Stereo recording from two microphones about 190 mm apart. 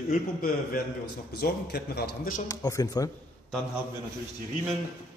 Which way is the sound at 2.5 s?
20° left (ahead or behind).